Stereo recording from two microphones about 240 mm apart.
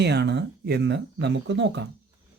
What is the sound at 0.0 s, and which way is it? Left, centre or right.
Speech, right.